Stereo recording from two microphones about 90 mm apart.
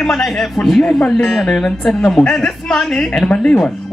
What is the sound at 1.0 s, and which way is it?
Speech, 15° left (ahead or behind).